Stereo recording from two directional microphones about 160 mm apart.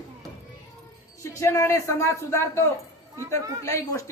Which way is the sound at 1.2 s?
20° left (ahead or behind).